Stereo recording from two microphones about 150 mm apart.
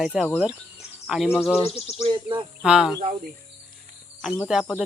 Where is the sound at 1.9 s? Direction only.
30° right (ahead or behind).